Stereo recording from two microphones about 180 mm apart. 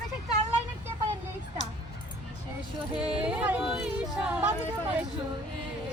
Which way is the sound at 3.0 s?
5° right (ahead or behind).